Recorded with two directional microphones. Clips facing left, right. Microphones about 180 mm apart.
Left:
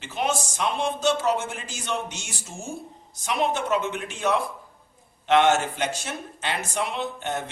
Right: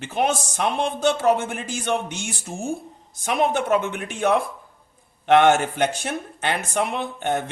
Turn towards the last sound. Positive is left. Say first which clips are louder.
# right 4 dB
turn(degrees=-55)  # may be behind; listen again after turning